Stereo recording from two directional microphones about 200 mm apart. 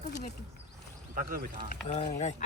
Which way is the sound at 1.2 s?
45° right (ahead or behind).